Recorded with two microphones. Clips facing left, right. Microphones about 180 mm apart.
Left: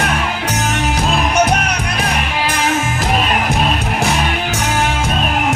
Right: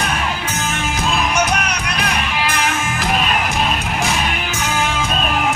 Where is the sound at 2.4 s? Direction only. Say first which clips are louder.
Left 3 dB; 40° left (ahead or behind).